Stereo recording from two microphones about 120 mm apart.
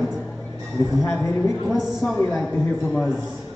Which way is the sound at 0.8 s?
35° left (ahead or behind).